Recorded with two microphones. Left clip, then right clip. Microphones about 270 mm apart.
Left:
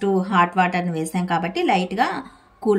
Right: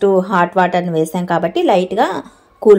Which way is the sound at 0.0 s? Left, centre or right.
Right.